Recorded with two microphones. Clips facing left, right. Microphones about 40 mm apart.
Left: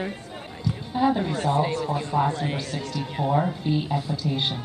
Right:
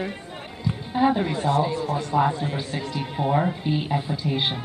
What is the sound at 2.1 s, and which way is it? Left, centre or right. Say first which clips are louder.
Speech: right 3 dB; right.